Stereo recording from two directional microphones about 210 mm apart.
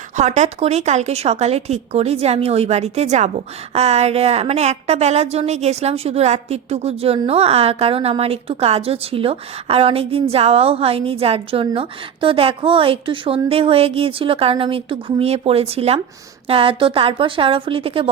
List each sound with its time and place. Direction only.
0.2 s a woman's voice: 35° right (ahead or behind)